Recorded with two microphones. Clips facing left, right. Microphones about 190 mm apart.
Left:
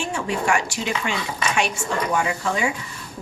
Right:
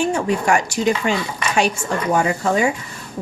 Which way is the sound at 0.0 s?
40° right (ahead or behind).